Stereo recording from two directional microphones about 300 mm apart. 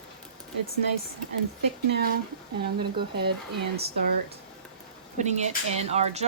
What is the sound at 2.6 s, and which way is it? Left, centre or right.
Speech, right.